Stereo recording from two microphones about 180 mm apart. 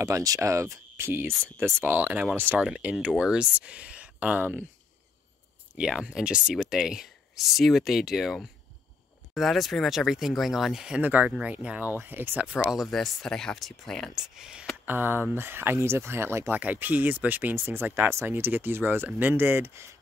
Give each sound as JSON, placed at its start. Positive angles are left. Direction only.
{"t": 0.0, "sound": "speech", "side_deg": -20}
{"t": 1.3, "sound": "speech", "side_deg": 5}
{"t": 1.6, "sound": "speech", "side_deg": -10}
{"t": 5.8, "sound": "speech", "side_deg": -5}